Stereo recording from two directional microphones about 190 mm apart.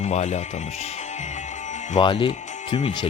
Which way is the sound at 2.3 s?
40° left (ahead or behind).